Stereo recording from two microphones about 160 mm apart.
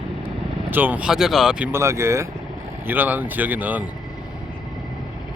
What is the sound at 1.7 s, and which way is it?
Speech, 15° right (ahead or behind).